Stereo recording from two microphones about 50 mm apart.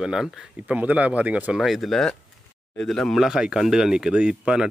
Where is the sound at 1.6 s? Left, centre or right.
Centre.